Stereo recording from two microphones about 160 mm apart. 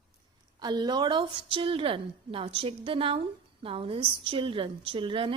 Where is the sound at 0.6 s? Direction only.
25° right (ahead or behind).